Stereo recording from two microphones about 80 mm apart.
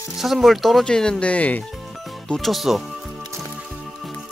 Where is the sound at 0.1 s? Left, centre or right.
Centre.